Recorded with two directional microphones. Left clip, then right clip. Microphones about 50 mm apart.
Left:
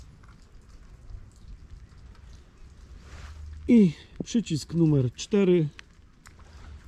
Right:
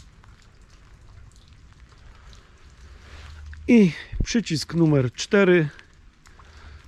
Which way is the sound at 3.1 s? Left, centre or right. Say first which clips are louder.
Right 3 dB; centre.